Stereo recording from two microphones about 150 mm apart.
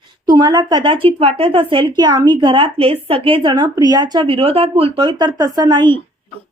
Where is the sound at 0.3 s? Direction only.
25° right (ahead or behind).